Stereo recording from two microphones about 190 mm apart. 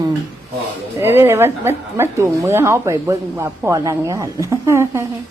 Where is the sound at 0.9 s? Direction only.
15° right (ahead or behind).